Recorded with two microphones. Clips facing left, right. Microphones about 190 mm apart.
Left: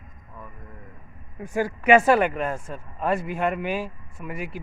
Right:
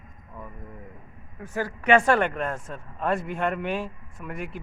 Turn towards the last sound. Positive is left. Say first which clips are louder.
# left 2 dB
turn(degrees=0)  # may be behind; listen again after turning